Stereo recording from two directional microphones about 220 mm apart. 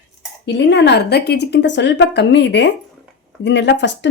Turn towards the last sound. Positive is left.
turn(degrees=55)  # may be behind; listen again after turning